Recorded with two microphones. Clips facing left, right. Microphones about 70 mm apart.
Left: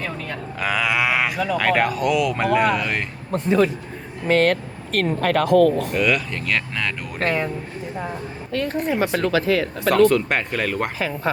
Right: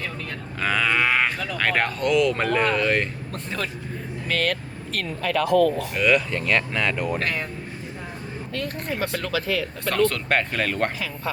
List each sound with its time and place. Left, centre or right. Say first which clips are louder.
0.6 s speech: left 1 dB; centre
3.3 s speech: left 13 dB; centre
4.3 s speech: left 8 dB; left
4.9 s speech: left 5 dB; left
5.9 s speech: even; centre
7.2 s speech: left 5 dB; left
9.0 s speech: left 5 dB; left
9.9 s speech: left 5 dB; centre